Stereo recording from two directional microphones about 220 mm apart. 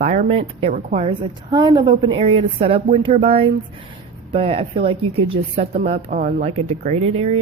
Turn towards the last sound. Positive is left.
turn(degrees=-25)  # may be behind; listen again after turning